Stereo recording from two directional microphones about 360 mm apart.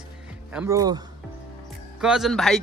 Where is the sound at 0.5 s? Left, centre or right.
Centre.